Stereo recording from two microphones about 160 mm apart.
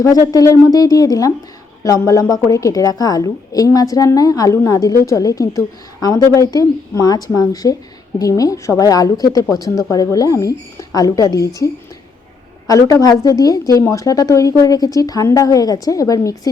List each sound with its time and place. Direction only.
0.0 s a woman's voice: 20° left (ahead or behind)